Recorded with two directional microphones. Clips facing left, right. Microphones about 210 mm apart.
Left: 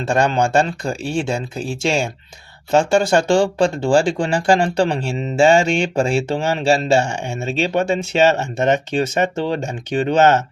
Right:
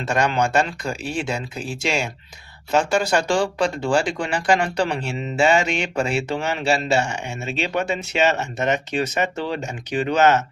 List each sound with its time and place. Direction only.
0.0 s speech: 30° left (ahead or behind)